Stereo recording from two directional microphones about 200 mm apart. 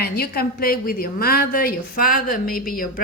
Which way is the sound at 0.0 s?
50° left (ahead or behind).